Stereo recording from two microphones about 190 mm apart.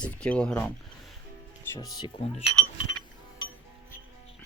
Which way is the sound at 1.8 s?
20° left (ahead or behind).